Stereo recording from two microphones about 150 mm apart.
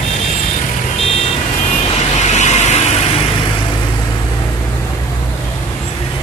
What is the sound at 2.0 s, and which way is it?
Vehicle, 50° left (ahead or behind).